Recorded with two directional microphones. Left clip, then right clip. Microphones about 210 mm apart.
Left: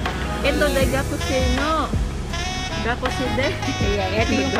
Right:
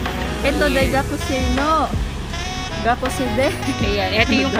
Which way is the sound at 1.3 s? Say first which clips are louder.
Left 2 dB; centre (ahead or behind).